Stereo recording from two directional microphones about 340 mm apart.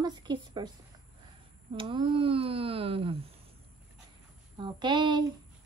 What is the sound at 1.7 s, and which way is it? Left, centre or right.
Speech, centre.